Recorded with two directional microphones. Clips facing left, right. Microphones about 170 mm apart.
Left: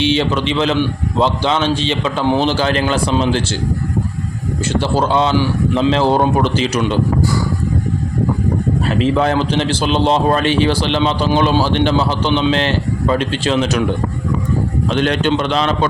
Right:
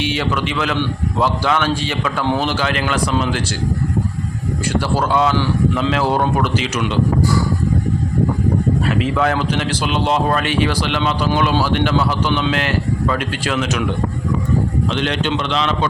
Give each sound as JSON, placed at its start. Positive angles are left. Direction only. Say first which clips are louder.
{"t": 0.0, "sound": "a man's voice", "louder": "left 4 dB", "side_deg": 25}
{"t": 4.7, "sound": "a man's voice", "louder": "left 2 dB", "side_deg": 25}
{"t": 8.9, "sound": "a man's voice", "louder": "left 6 dB", "side_deg": 30}
{"t": 14.8, "sound": "a man's voice", "louder": "left 4 dB", "side_deg": 45}